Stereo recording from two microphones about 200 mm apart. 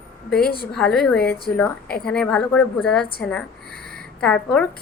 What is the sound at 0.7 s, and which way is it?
A woman's voice, centre (ahead or behind).